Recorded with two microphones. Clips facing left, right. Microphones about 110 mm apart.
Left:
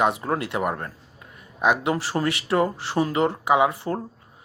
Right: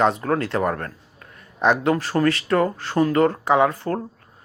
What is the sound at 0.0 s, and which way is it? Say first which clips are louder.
Speech: right 3 dB; 20° left (ahead or behind).